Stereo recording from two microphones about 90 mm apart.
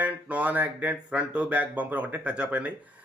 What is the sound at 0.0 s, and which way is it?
Speech, 15° right (ahead or behind).